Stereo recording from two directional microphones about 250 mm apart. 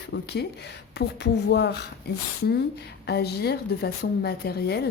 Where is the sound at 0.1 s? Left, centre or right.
Left.